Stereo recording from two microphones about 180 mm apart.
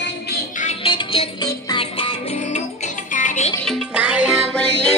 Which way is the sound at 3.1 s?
45° left (ahead or behind).